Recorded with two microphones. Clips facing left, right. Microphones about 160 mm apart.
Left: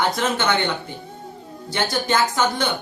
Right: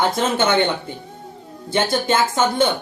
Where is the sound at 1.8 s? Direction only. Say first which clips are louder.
Even; 25° right (ahead or behind).